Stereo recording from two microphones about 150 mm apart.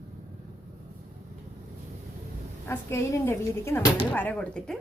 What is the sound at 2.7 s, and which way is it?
Speech, 20° left (ahead or behind).